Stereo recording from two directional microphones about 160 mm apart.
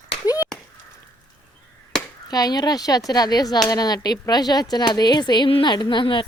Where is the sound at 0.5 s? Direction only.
5° left (ahead or behind).